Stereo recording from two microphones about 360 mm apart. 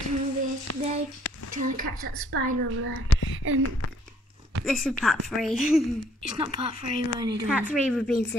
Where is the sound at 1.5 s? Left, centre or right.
Right.